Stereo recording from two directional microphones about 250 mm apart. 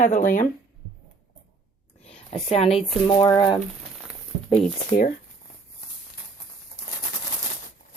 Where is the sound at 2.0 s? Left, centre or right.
Left.